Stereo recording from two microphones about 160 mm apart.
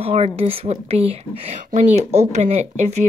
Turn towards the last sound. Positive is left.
turn(degrees=-45)  # may be behind; listen again after turning